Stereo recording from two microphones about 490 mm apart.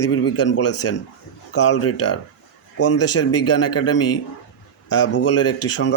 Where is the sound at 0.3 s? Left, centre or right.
Left.